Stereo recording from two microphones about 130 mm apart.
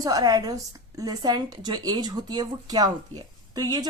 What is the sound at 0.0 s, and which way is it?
A woman's voice, 30° right (ahead or behind).